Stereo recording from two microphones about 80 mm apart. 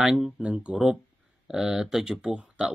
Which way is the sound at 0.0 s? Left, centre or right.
Centre.